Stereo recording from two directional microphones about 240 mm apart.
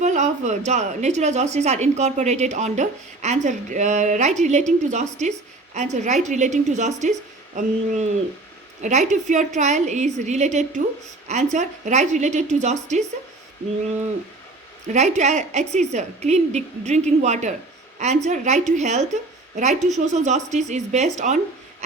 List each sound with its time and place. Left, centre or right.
0.0 s a woman's voice: right
14.8 s a woman's voice: right